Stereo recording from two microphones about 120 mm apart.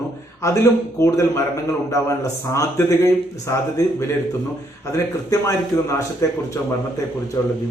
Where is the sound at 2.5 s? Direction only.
25° left (ahead or behind).